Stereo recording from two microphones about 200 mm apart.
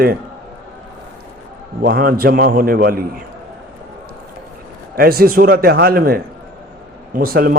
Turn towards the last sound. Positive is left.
turn(degrees=-50)  # may be behind; listen again after turning